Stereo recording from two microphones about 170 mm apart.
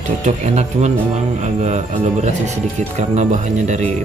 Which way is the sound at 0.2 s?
40° right (ahead or behind).